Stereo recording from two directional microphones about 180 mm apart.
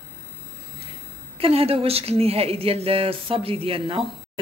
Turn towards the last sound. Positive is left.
turn(degrees=-30)  # may be behind; listen again after turning